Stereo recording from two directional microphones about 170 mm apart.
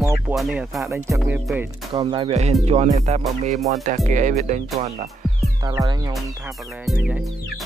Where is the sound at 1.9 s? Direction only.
30° right (ahead or behind); by 4.6 s 45° right (ahead or behind).